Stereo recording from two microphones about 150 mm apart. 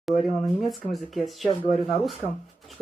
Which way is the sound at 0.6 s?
Centre (ahead or behind).